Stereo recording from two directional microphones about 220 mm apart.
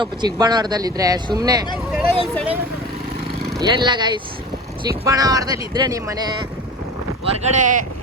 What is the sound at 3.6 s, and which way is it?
Speech, 20° right (ahead or behind).